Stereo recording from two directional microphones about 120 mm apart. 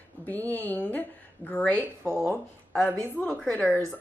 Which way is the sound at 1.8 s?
20° right (ahead or behind).